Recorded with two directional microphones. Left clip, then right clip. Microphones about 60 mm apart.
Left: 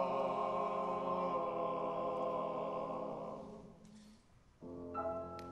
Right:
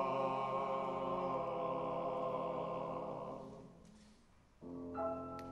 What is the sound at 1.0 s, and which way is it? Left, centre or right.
Music, centre.